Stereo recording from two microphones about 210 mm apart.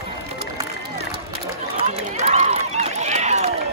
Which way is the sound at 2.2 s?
30° right (ahead or behind).